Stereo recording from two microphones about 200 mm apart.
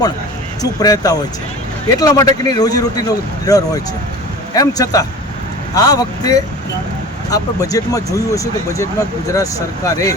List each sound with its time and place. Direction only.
0.6 s speech: 20° left (ahead or behind)